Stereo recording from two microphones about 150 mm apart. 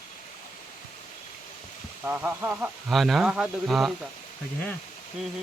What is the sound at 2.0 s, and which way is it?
Speech, 10° right (ahead or behind).